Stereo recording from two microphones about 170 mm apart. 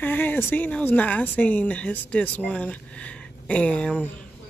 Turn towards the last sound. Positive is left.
turn(degrees=5)  # may be behind; listen again after turning